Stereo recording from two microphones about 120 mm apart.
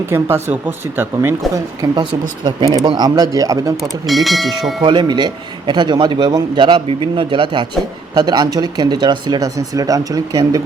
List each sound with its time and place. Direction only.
0.1 s speech: 20° right (ahead or behind)
1.5 s speech: 35° right (ahead or behind)
3.8 s speech: centre (ahead or behind)
4.8 s speech: 40° right (ahead or behind)